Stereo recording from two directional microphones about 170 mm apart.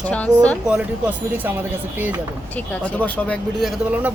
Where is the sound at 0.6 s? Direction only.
5° right (ahead or behind).